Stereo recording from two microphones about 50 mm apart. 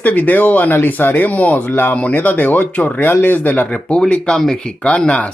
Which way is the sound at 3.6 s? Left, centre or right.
Left.